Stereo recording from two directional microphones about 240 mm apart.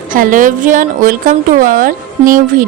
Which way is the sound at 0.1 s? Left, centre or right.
Right.